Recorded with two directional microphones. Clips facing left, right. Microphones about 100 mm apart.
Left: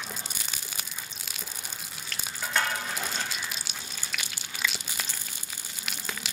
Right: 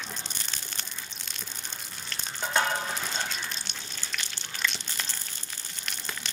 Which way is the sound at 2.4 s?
25° right (ahead or behind).